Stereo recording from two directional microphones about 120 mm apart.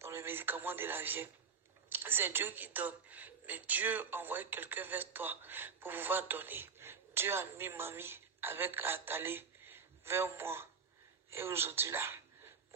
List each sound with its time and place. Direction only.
0.0 s speech: 20° right (ahead or behind)